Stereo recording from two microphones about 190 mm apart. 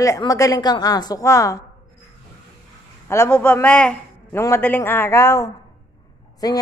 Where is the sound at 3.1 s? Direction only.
15° left (ahead or behind).